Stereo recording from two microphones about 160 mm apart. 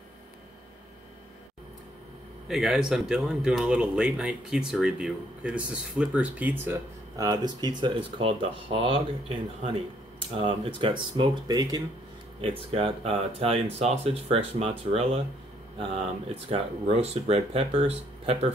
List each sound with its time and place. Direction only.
2.4 s speech: 5° right (ahead or behind); by 11.8 s 25° right (ahead or behind)
12.4 s speech: 35° right (ahead or behind)
16.4 s speech: 40° right (ahead or behind)